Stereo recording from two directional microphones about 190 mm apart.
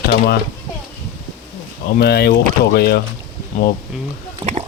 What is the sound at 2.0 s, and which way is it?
Speech, 60° left (ahead or behind).